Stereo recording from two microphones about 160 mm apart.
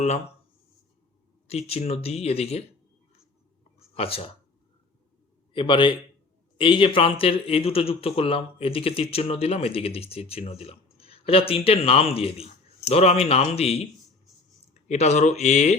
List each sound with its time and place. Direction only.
1.5 s speech: 40° left (ahead or behind)
3.9 s speech: 35° left (ahead or behind)
5.5 s speech: 30° left (ahead or behind)